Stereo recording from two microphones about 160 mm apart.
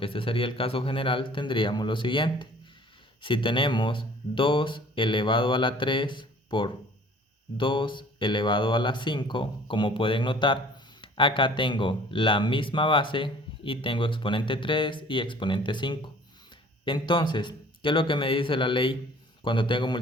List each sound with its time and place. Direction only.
0.0 s speech: 35° left (ahead or behind)